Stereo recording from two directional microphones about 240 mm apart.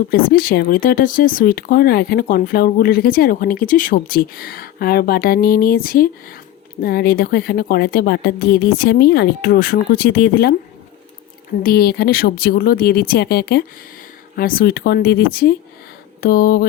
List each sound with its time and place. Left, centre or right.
0.1 s speech: left
11.6 s speech: left